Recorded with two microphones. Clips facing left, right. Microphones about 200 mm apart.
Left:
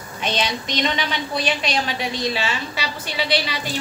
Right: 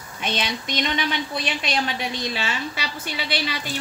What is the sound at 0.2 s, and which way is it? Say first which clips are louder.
A woman's voice: left 3 dB; 55° right (ahead or behind).